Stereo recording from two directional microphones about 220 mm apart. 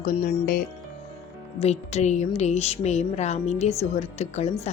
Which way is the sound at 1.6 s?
30° left (ahead or behind).